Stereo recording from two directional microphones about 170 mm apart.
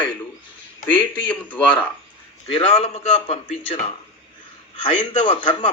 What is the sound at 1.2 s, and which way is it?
Speech, 10° left (ahead or behind).